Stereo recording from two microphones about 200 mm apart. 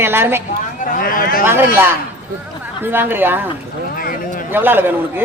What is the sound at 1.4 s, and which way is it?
Speech, 10° right (ahead or behind).